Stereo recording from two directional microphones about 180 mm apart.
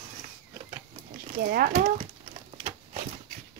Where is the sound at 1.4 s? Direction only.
55° right (ahead or behind).